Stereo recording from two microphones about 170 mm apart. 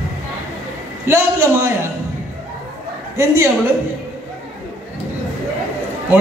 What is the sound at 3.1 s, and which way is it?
Speech, 15° right (ahead or behind).